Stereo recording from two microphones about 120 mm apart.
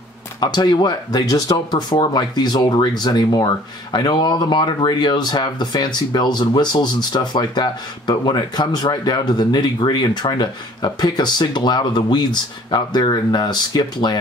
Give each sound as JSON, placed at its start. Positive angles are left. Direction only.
{"t": 0.4, "sound": "speech", "side_deg": 40}